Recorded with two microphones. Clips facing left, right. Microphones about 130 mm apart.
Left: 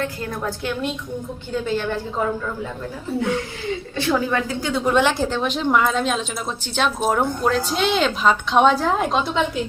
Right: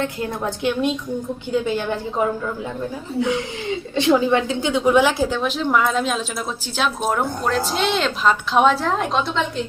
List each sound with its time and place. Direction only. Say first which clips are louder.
0.0 s a woman's voice: right 2 dB; 20° right (ahead or behind)
3.9 s a woman's voice: right 5 dB; 20° right (ahead or behind); by 9.4 s centre (ahead or behind)